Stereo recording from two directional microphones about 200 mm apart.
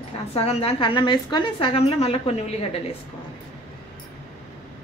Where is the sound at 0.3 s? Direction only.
30° left (ahead or behind).